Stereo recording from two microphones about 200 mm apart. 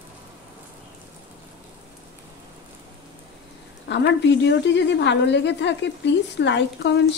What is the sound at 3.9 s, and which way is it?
A woman's voice, 60° left (ahead or behind).